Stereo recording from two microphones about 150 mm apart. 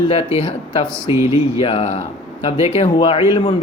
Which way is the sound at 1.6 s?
45° left (ahead or behind).